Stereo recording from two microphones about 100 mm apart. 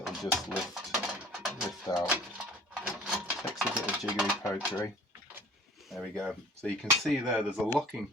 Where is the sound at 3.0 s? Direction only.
10° right (ahead or behind).